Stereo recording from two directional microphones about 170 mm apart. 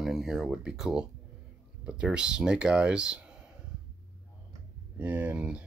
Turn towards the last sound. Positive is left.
turn(degrees=-10)  # may be behind; listen again after turning